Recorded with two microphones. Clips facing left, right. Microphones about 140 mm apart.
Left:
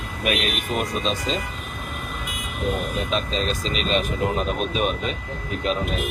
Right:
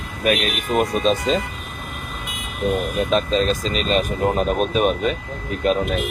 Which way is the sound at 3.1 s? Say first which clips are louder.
Right 7 dB; 45° right (ahead or behind).